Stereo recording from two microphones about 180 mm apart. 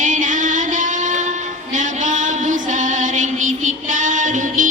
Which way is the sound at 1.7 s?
45° right (ahead or behind).